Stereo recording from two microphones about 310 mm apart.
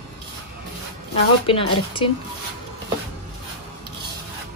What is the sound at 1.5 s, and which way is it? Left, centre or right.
Speech, centre.